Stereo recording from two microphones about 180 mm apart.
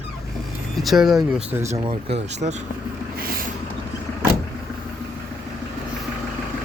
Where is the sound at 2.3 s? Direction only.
40° right (ahead or behind).